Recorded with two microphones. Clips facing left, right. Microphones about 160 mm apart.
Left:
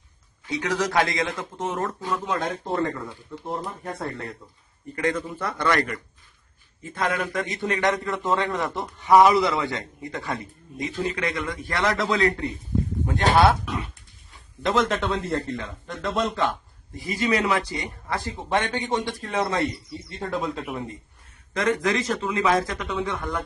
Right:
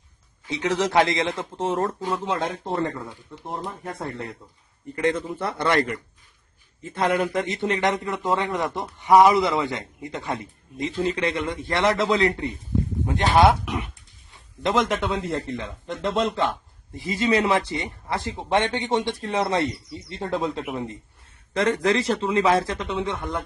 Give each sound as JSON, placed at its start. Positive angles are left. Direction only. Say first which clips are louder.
{"t": 0.4, "sound": "speech", "louder": "right 2 dB", "side_deg": -25}